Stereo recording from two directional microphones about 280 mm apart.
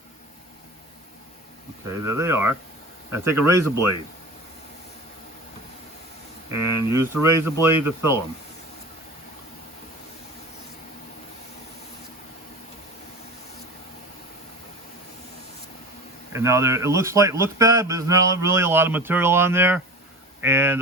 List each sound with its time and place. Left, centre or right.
1.9 s speech: centre
3.6 s speech: right
6.5 s speech: centre
16.3 s speech: centre